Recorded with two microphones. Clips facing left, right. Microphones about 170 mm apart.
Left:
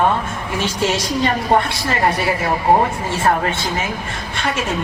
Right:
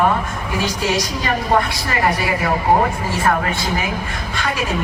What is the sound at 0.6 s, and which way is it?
Speech, 25° left (ahead or behind).